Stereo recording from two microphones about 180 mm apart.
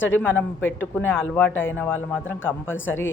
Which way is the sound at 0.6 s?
90° left.